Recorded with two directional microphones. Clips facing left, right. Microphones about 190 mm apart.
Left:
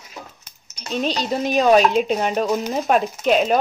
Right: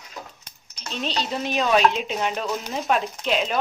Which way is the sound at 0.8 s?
45° left (ahead or behind).